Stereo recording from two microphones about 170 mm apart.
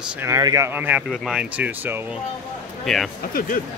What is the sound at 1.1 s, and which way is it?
Speech, centre (ahead or behind).